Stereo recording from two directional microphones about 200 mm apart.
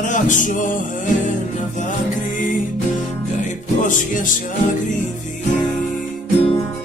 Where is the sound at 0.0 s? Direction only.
40° left (ahead or behind).